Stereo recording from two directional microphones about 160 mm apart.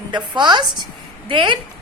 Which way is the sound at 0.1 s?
25° right (ahead or behind).